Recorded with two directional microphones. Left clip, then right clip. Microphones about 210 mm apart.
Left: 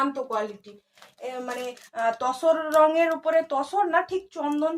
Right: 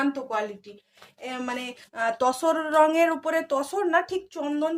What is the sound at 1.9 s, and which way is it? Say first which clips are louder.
Speech: right 1 dB; 45° right (ahead or behind).